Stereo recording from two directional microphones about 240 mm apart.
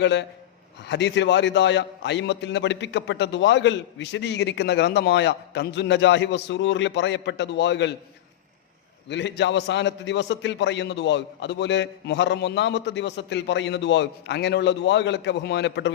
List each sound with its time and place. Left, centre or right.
0.0 s a man's voice: left
9.0 s a man's voice: left